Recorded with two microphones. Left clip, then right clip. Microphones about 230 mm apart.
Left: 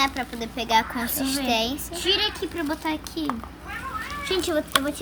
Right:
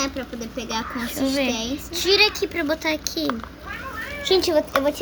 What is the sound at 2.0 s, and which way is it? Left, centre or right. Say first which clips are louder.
A child's voice: right 5 dB; centre.